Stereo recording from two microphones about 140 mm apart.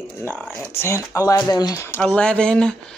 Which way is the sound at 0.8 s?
20° left (ahead or behind).